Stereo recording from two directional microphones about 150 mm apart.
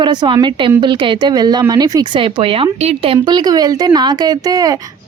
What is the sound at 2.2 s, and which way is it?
Speech, 35° right (ahead or behind).